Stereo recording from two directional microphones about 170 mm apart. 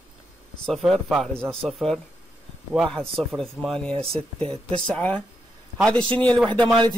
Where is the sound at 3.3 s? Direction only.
Centre (ahead or behind).